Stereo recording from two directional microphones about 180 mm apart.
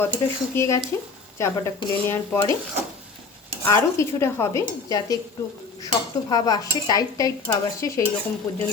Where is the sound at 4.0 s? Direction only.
15° left (ahead or behind).